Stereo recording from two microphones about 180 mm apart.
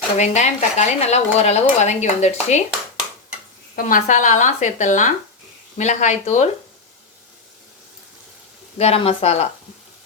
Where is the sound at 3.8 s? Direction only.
50° left (ahead or behind).